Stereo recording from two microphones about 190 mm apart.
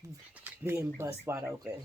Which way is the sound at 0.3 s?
15° right (ahead or behind).